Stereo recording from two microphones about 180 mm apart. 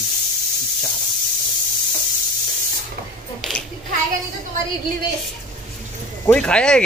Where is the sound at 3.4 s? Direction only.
Centre (ahead or behind).